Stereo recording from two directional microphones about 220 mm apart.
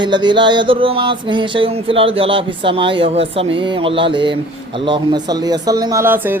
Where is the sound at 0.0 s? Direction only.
20° right (ahead or behind).